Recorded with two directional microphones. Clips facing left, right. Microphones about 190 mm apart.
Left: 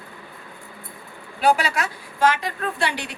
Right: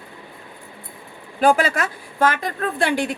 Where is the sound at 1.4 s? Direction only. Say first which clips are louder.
Right 3 dB; 50° right (ahead or behind).